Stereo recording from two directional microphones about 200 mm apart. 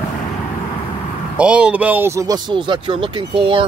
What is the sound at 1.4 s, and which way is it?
A man's voice, 5° right (ahead or behind).